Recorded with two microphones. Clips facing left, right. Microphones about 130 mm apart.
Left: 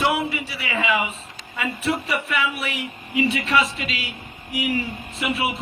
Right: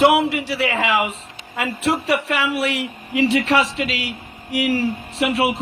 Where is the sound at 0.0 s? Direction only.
75° right (ahead or behind).